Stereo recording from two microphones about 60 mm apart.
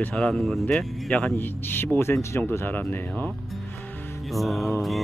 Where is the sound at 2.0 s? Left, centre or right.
Left.